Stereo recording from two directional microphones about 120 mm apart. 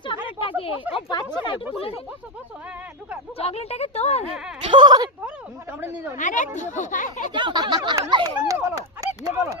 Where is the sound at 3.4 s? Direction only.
60° left (ahead or behind).